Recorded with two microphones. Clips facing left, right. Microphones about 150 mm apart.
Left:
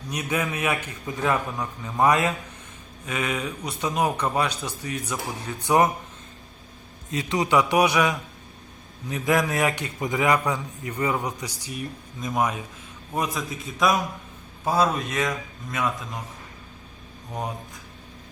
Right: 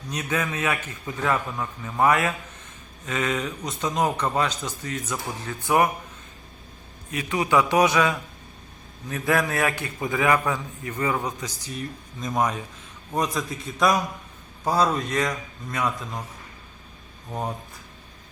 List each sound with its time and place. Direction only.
0.1 s a man's voice: 10° left (ahead or behind)
7.1 s a man's voice: 20° left (ahead or behind); by 15.9 s centre (ahead or behind)